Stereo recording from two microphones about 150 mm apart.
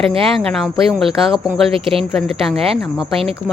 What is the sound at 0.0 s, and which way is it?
Speech, 35° right (ahead or behind).